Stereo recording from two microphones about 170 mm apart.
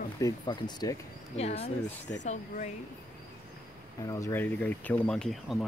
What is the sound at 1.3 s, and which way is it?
Speech, 35° left (ahead or behind).